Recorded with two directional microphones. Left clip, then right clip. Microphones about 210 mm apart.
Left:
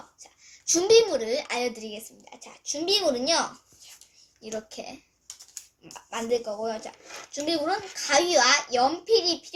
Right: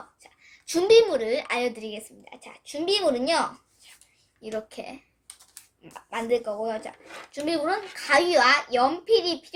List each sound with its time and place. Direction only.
0.2 s a woman's voice: 5° right (ahead or behind)